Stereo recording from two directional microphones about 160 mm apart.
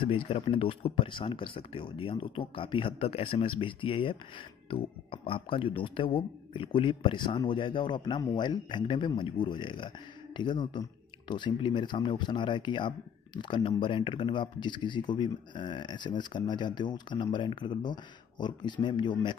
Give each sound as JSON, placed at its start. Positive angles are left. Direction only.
{"t": 0.0, "sound": "speech", "side_deg": 35}